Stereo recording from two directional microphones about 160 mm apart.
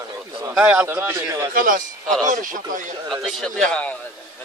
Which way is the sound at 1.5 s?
55° right (ahead or behind).